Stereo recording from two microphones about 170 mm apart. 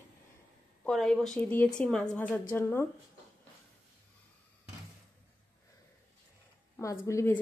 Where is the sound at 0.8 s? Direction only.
5° left (ahead or behind).